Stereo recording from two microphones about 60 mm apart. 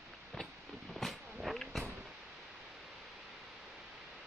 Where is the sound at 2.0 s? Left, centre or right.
Centre.